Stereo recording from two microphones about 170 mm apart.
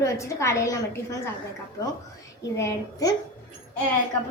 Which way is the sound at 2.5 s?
20° left (ahead or behind).